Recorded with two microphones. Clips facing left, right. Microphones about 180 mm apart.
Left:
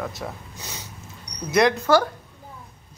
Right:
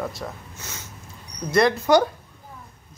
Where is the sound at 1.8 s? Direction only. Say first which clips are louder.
Right 1 dB; 20° right (ahead or behind).